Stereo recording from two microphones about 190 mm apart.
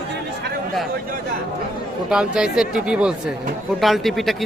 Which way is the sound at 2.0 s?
5° right (ahead or behind).